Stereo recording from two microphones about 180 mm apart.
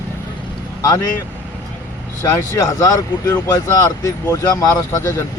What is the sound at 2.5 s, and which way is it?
Speech, 20° left (ahead or behind).